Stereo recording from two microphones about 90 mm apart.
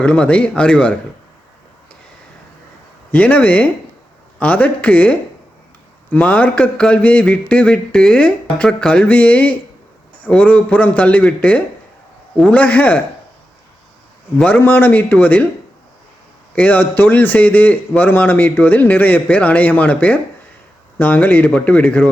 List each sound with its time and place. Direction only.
0.0 s a man's voice: 10° left (ahead or behind)
3.1 s a man's voice: 15° left (ahead or behind)
14.3 s a man's voice: 15° left (ahead or behind)
16.6 s a man's voice: 20° left (ahead or behind)